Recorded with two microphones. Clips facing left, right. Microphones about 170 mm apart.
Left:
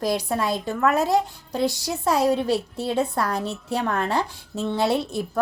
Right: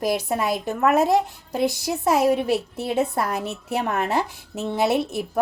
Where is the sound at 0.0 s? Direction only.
20° right (ahead or behind).